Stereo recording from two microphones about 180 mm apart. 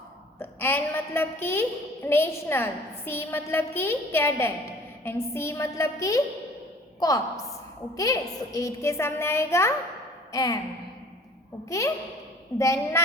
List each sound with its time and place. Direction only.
0.3 s a woman's voice: 10° left (ahead or behind)
12.5 s a woman's voice: 15° left (ahead or behind)